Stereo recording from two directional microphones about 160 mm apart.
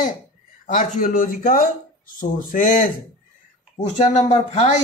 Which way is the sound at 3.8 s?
45° left (ahead or behind).